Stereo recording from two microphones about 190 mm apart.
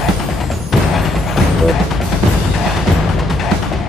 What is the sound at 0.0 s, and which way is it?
Music, centre (ahead or behind).